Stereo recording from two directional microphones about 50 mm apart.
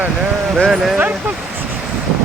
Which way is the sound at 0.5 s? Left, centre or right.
Centre.